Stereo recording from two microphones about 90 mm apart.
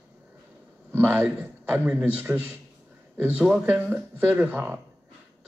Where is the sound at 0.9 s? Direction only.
20° right (ahead or behind).